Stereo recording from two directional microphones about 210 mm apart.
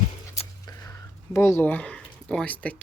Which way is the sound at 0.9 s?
15° left (ahead or behind).